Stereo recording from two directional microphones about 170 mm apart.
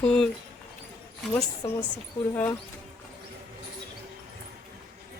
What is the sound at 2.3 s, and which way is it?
Speech, 10° left (ahead or behind).